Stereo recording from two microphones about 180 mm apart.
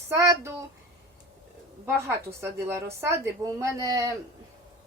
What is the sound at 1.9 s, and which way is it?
A woman's voice, 15° right (ahead or behind).